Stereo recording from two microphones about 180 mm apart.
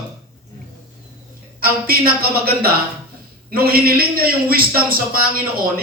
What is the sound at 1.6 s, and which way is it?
A man's voice, 60° right (ahead or behind).